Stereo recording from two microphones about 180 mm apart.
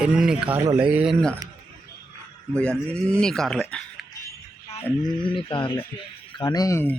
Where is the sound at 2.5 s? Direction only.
5° left (ahead or behind).